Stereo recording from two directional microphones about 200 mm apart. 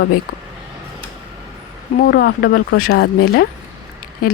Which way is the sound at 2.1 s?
50° left (ahead or behind).